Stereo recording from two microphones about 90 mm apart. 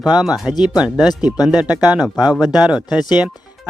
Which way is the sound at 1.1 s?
50° left (ahead or behind).